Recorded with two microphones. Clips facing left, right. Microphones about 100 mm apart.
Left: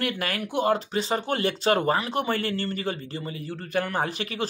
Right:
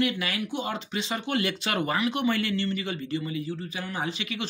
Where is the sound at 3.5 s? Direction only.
55° left (ahead or behind).